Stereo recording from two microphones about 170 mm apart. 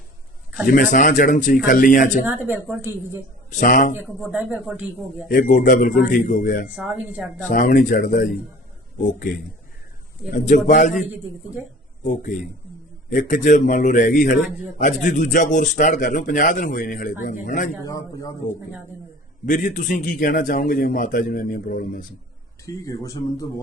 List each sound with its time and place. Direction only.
0.7 s speech: 50° left (ahead or behind)
2.2 s a woman's voice: 15° right (ahead or behind)
3.6 s speech: 50° left (ahead or behind)
3.9 s a woman's voice: 10° right (ahead or behind)
5.3 s speech: 50° left (ahead or behind)
6.7 s speech: 5° right (ahead or behind)
7.5 s speech: 50° left (ahead or behind)
10.7 s speech: 50° left (ahead or behind)
10.9 s a woman's voice: 5° right (ahead or behind)
13.1 s speech: 50° left (ahead or behind)
17.8 s speech: 20° left (ahead or behind)
19.5 s speech: 45° left (ahead or behind)
22.6 s speech: 20° left (ahead or behind)